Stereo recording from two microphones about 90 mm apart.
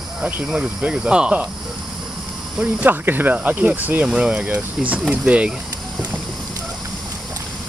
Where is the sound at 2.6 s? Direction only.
20° right (ahead or behind).